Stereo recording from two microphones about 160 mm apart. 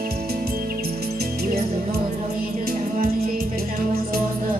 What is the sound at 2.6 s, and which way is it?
Music, 65° right (ahead or behind).